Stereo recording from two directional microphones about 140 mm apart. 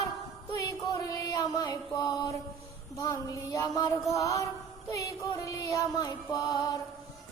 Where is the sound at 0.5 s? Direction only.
25° left (ahead or behind).